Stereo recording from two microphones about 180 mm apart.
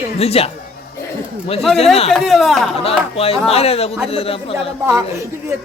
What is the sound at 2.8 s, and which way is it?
Speech, 35° left (ahead or behind).